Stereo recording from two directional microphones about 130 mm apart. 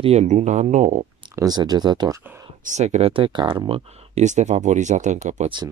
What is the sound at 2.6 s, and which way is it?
Speech, 65° right (ahead or behind).